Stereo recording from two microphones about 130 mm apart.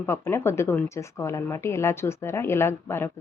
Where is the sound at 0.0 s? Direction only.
20° left (ahead or behind).